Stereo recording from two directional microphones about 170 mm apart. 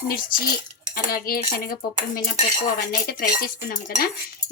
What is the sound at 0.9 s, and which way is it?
A woman's voice, 60° left (ahead or behind).